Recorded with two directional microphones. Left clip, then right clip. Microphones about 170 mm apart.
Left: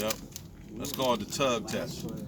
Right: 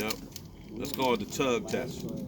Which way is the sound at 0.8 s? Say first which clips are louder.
Even; 45° left (ahead or behind).